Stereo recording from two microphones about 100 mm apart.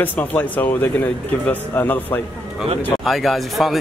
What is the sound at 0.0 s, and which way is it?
Speech, 15° left (ahead or behind).